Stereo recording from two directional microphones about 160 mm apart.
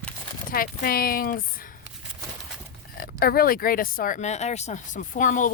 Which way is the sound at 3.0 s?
70° left (ahead or behind).